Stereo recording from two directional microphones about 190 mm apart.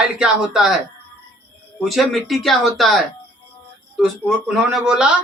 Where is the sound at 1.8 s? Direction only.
Centre (ahead or behind).